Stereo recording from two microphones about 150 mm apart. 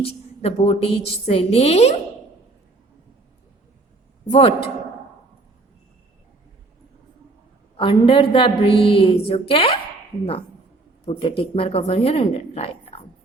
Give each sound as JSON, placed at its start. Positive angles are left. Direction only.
{"t": 0.0, "sound": "a woman's voice", "side_deg": 40}
{"t": 4.3, "sound": "a woman's voice", "side_deg": 40}
{"t": 7.8, "sound": "a woman's voice", "side_deg": 35}
{"t": 11.2, "sound": "a woman's voice", "side_deg": 40}